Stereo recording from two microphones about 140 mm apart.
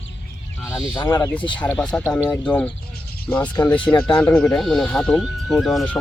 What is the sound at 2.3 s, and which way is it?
Speech, 10° left (ahead or behind).